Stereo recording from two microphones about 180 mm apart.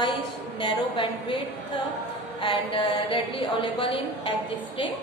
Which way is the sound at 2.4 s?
30° left (ahead or behind).